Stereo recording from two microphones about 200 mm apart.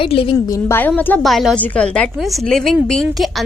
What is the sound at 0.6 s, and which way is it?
A woman's voice, 10° left (ahead or behind).